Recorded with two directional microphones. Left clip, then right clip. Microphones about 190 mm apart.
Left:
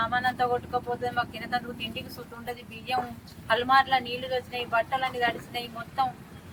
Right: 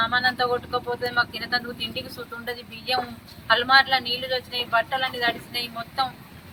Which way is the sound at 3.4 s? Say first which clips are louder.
Right 4 dB; 5° left (ahead or behind).